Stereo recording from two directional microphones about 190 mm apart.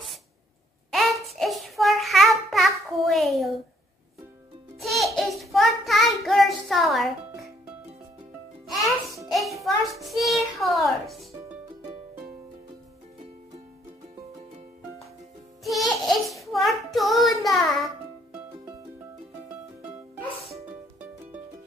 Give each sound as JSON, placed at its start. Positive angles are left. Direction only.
{"t": 0.9, "sound": "child singing", "side_deg": 0}
{"t": 4.7, "sound": "child singing", "side_deg": 0}
{"t": 9.3, "sound": "a child's voice", "side_deg": 0}
{"t": 15.6, "sound": "music", "side_deg": 0}